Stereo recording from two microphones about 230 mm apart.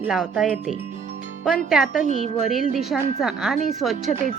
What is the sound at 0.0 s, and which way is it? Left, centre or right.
A woman's voice, centre.